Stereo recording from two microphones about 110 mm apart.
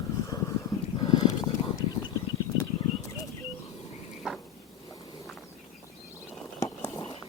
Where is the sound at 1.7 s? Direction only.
35° left (ahead or behind).